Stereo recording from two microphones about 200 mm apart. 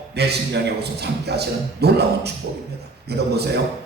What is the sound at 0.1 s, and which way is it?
A man's voice, 55° right (ahead or behind).